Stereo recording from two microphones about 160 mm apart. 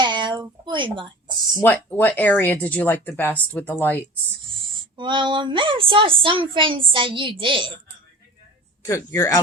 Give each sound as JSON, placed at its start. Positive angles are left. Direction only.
{"t": 0.0, "sound": "a sound", "side_deg": -30}
{"t": 1.6, "sound": "speech", "side_deg": 10}
{"t": 4.9, "sound": "speech", "side_deg": -30}
{"t": 8.8, "sound": "speech", "side_deg": 20}